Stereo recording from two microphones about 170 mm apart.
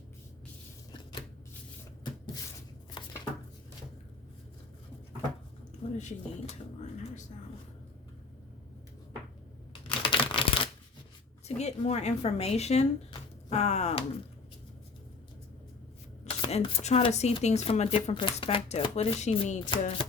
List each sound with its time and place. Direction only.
6.0 s speech: 40° left (ahead or behind)
9.8 s crumpling: 30° left (ahead or behind)
11.4 s speech: 40° left (ahead or behind)
16.3 s speech: 35° left (ahead or behind)